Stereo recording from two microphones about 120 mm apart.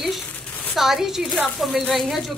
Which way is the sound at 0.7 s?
5° right (ahead or behind).